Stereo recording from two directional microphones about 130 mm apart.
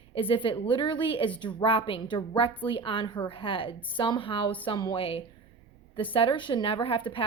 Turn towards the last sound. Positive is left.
turn(degrees=40)  # may be behind; listen again after turning